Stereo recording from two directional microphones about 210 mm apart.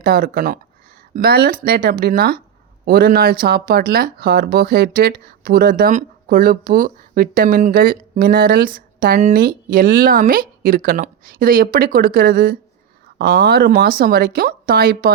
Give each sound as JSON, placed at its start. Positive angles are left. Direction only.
{"t": 0.0, "sound": "speech", "side_deg": -45}